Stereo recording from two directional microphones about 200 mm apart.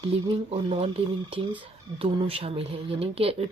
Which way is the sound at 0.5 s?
30° right (ahead or behind).